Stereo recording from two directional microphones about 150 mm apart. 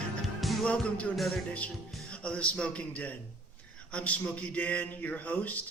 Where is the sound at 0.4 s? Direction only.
5° left (ahead or behind).